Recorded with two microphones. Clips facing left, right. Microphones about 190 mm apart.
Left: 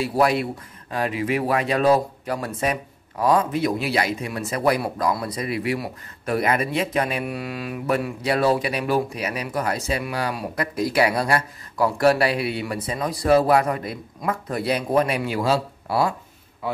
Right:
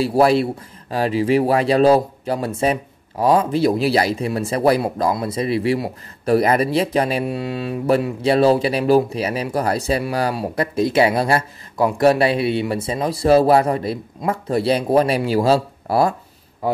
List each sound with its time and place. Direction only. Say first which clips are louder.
0.0 s a man's voice: right 5 dB; 30° right (ahead or behind)